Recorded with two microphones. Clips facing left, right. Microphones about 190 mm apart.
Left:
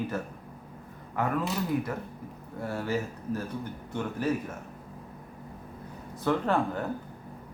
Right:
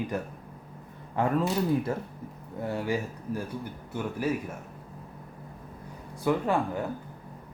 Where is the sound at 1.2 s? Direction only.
30° right (ahead or behind).